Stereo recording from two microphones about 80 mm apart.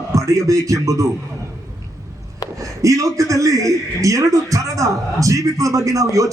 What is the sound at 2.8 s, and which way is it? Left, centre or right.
A man's voice, right.